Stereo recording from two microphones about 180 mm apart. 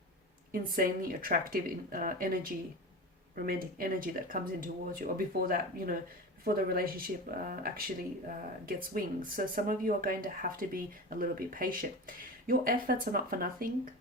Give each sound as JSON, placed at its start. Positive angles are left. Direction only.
{"t": 0.5, "sound": "speech", "side_deg": -50}